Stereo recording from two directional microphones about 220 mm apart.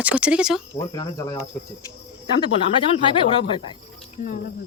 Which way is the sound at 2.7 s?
25° left (ahead or behind).